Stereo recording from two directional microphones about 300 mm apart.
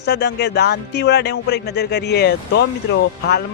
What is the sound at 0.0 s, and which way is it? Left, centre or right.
Speech, left.